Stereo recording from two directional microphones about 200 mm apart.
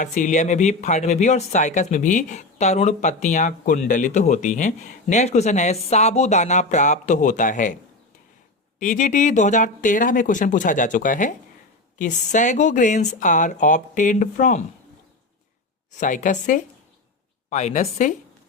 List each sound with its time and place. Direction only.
0.0 s speech: 40° left (ahead or behind)
8.8 s speech: 40° left (ahead or behind)
15.9 s speech: 40° left (ahead or behind)